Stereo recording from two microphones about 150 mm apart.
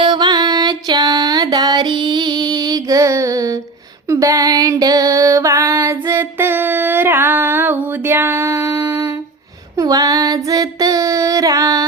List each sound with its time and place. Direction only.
0.0 s music: 30° right (ahead or behind)
9.7 s female singing: 25° right (ahead or behind)